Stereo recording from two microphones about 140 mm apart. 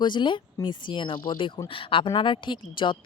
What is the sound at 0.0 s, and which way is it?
Speech, 35° left (ahead or behind).